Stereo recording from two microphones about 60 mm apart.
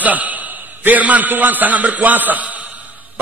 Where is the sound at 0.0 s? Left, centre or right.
Right.